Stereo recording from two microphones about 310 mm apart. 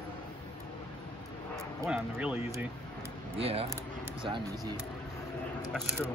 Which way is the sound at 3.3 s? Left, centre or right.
Centre.